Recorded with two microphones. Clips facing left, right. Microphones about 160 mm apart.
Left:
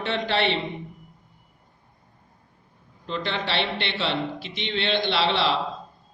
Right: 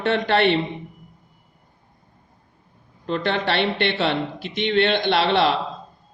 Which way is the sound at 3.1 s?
55° right (ahead or behind).